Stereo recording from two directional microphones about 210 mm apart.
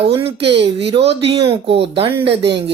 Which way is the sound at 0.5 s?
25° right (ahead or behind).